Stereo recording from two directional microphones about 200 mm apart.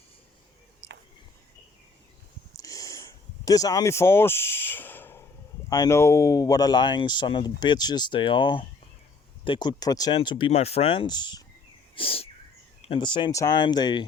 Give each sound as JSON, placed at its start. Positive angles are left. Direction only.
{"t": 2.6, "sound": "a sound", "side_deg": 15}
{"t": 5.6, "sound": "speech", "side_deg": 15}
{"t": 11.9, "sound": "bird", "side_deg": 30}
{"t": 12.8, "sound": "speech", "side_deg": 25}